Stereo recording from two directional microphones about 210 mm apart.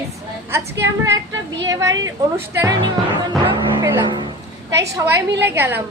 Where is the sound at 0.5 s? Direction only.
15° right (ahead or behind).